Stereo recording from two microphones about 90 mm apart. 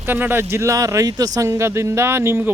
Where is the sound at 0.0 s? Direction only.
25° right (ahead or behind).